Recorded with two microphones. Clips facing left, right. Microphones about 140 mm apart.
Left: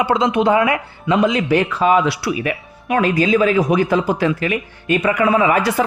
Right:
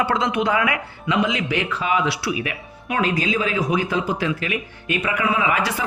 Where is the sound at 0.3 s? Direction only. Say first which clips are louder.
Left 6 dB; 30° left (ahead or behind).